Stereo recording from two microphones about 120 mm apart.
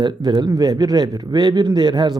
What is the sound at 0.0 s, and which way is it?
Speech, 40° right (ahead or behind).